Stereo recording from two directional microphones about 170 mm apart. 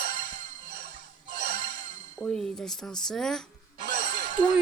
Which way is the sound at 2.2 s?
5° left (ahead or behind).